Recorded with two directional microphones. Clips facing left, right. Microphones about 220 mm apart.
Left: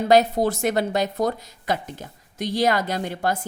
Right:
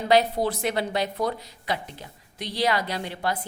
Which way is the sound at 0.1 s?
45° left (ahead or behind).